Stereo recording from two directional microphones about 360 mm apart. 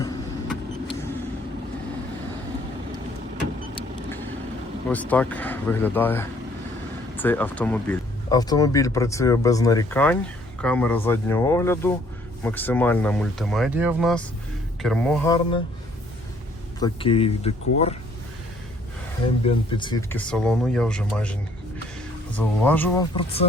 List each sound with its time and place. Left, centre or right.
0.0 s vehicle: centre
3.8 s vehicle: centre
4.9 s speech: centre
16.8 s speech: centre
19.5 s speech: centre
22.4 s speech: centre